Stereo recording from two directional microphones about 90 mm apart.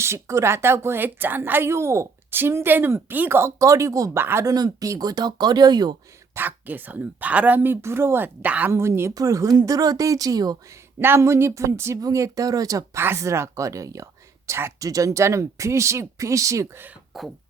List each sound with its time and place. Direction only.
0.0 s a woman's voice: 30° right (ahead or behind)
4.2 s a woman's voice: 25° right (ahead or behind)
4.4 s speech: 45° right (ahead or behind)
6.3 s a woman's voice: 20° right (ahead or behind)
8.7 s a woman's voice: 30° right (ahead or behind); by 10.6 s 45° right (ahead or behind)
11.0 s a woman's voice: 30° right (ahead or behind)
13.0 s speech: 30° right (ahead or behind)
17.1 s beatboxing: centre (ahead or behind)